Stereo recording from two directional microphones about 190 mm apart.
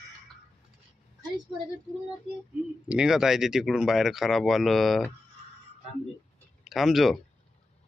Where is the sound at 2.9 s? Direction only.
5° right (ahead or behind).